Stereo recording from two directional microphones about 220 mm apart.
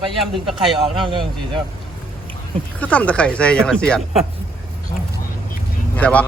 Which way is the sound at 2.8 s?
5° left (ahead or behind).